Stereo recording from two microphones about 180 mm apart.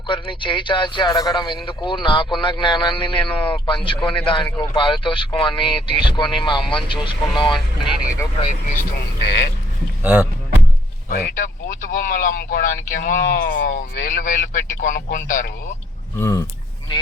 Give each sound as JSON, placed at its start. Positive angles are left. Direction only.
{"t": 0.1, "sound": "a man's voice", "side_deg": 25}
{"t": 8.4, "sound": "speech", "side_deg": 40}
{"t": 9.2, "sound": "speech", "side_deg": 65}
{"t": 10.0, "sound": "speech", "side_deg": -10}
{"t": 11.1, "sound": "speech", "side_deg": 50}
{"t": 16.1, "sound": "speech", "side_deg": 15}